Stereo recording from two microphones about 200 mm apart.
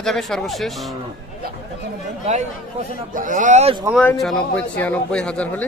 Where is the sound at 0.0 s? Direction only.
Centre (ahead or behind).